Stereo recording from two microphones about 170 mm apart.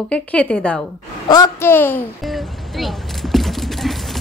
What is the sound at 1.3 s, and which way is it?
Speech, 20° left (ahead or behind).